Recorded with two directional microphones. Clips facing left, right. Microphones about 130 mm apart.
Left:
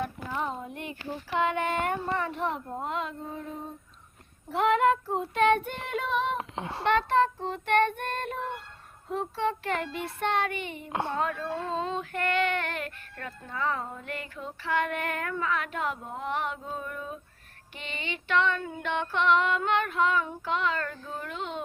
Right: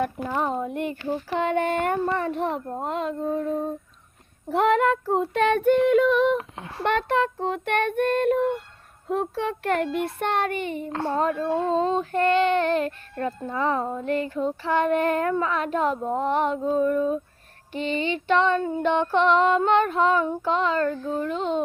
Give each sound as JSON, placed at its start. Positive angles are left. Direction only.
{"t": 0.0, "sound": "speech", "side_deg": -60}
{"t": 4.5, "sound": "child singing", "side_deg": -50}
{"t": 6.3, "sound": "speech", "side_deg": 25}
{"t": 6.8, "sound": "child singing", "side_deg": -55}
{"t": 9.0, "sound": "speech", "side_deg": -55}
{"t": 11.1, "sound": "child singing", "side_deg": -35}